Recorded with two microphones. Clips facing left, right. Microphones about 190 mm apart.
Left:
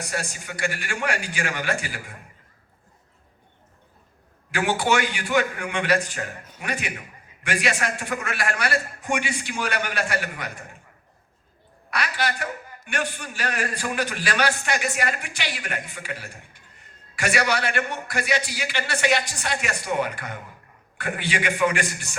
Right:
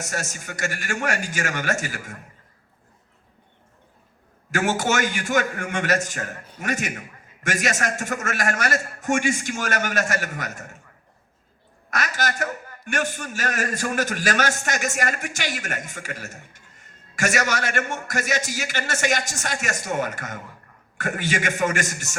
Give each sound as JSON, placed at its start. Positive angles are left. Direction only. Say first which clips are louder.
{"t": 0.0, "sound": "a man's voice", "louder": "even", "side_deg": -45}
{"t": 4.5, "sound": "a man's voice", "louder": "even", "side_deg": -45}
{"t": 11.9, "sound": "a man's voice", "louder": "even", "side_deg": -45}